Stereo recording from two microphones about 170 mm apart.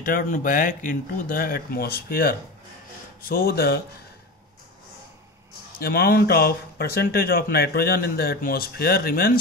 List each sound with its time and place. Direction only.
0.0 s speech: 55° left (ahead or behind)
5.8 s speech: 65° left (ahead or behind)